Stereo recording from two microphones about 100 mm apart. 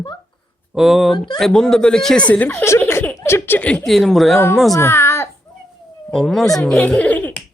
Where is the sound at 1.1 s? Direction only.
45° left (ahead or behind).